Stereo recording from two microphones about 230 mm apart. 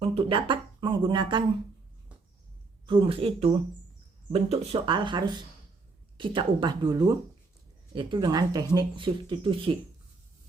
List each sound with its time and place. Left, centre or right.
0.0 s speech: right
2.8 s speech: right